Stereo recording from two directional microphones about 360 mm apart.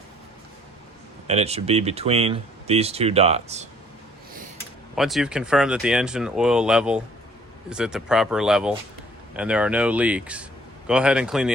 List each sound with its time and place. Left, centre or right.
1.3 s speech: centre
4.9 s speech: centre